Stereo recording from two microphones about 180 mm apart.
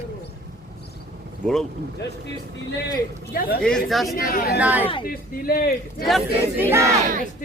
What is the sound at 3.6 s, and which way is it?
Speech, 5° left (ahead or behind).